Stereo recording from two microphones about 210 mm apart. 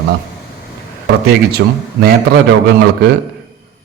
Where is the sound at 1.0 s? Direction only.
50° right (ahead or behind).